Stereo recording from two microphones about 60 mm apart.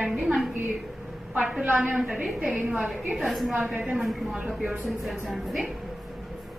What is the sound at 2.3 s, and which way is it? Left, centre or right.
Speech, centre.